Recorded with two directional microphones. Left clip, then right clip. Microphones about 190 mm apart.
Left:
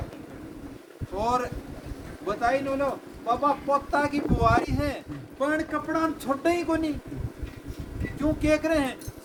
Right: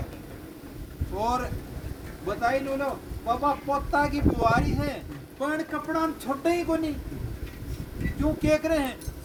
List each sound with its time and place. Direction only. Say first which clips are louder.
1.1 s speech: left 1 dB; centre (ahead or behind)
8.2 s speech: even; 5° left (ahead or behind)